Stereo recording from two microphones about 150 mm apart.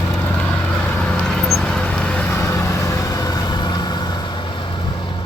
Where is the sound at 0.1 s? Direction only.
10° left (ahead or behind).